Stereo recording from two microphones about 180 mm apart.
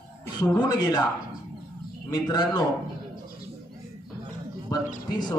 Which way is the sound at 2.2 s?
25° left (ahead or behind).